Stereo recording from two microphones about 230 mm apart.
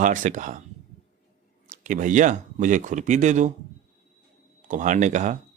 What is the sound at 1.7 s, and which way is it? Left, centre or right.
Speech, right.